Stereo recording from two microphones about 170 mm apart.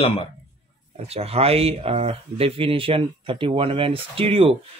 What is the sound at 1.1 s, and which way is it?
Speech, 35° right (ahead or behind).